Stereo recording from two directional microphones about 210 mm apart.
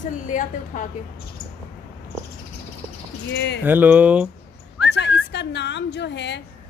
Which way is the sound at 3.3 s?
55° left (ahead or behind).